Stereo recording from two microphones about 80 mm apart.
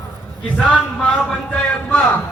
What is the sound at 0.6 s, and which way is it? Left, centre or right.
Speech, centre.